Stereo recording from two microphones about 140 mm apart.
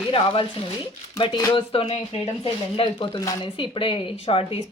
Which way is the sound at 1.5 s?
45° left (ahead or behind).